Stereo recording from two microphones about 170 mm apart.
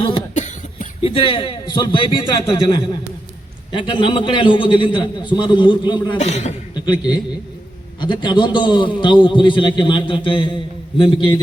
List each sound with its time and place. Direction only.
0.3 s cough: 45° left (ahead or behind)
1.0 s a man's voice: 30° left (ahead or behind)
6.1 s a man's voice: 40° left (ahead or behind)
6.7 s a man's voice: 25° left (ahead or behind)